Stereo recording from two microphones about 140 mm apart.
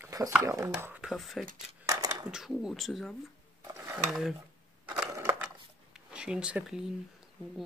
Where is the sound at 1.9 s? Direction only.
25° right (ahead or behind).